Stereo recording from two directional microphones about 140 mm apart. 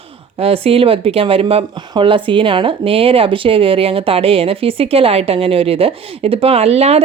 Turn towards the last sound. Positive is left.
turn(degrees=-50)  # may be behind; listen again after turning